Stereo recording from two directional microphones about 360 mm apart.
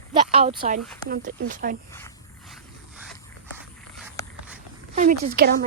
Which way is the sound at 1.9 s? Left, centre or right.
Centre.